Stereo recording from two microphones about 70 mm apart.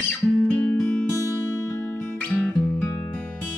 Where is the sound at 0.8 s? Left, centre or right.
Centre.